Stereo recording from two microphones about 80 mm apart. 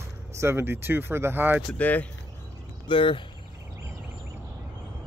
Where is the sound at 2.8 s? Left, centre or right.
Left.